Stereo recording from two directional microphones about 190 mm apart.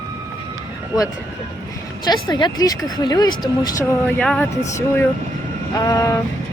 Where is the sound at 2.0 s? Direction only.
20° left (ahead or behind).